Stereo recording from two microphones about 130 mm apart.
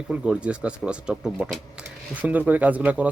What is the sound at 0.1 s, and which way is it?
Speech, 10° right (ahead or behind).